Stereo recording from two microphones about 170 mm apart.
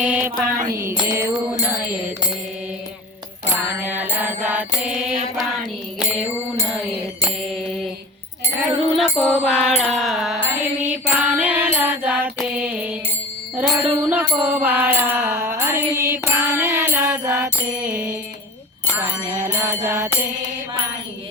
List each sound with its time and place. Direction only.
0.0 s mantra: 10° right (ahead or behind)
3.5 s mantra: 10° right (ahead or behind)
9.0 s music: 5° left (ahead or behind)
14.4 s mantra: 10° right (ahead or behind)
19.5 s music: 15° right (ahead or behind)